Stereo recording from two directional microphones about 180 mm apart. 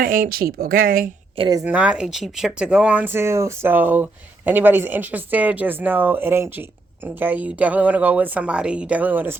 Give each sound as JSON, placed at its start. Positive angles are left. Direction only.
{"t": 0.0, "sound": "speech", "side_deg": -50}
{"t": 1.4, "sound": "speech", "side_deg": -20}
{"t": 1.6, "sound": "speech", "side_deg": -5}